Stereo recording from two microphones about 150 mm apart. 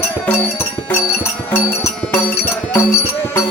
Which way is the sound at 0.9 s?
15° left (ahead or behind).